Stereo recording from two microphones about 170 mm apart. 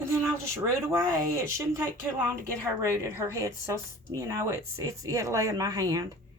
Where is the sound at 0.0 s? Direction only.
15° right (ahead or behind).